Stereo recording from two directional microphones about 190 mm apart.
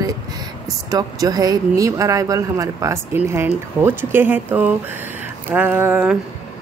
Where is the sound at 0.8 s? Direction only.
20° right (ahead or behind).